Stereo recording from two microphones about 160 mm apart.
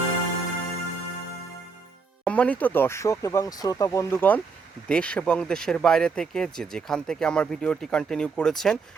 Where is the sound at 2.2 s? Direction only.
10° left (ahead or behind).